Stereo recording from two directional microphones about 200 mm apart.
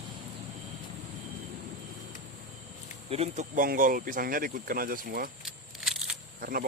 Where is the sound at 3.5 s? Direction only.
45° right (ahead or behind).